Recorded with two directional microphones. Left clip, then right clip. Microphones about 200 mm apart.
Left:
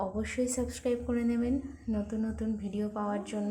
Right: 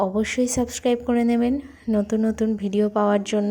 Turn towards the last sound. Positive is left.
turn(degrees=-40)  # may be behind; listen again after turning